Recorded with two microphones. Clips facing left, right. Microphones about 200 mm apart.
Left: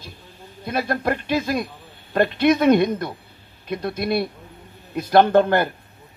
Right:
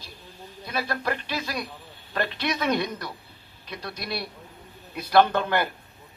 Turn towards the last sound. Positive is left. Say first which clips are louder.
# left 6 dB
turn(degrees=50)  # may be behind; listen again after turning